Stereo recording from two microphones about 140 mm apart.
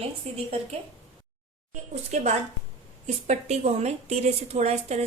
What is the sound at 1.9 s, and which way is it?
A woman's voice, 55° right (ahead or behind).